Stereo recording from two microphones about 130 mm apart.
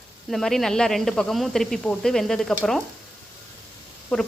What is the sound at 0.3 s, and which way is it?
Speech, centre (ahead or behind).